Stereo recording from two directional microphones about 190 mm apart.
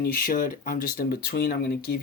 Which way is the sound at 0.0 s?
50° left (ahead or behind).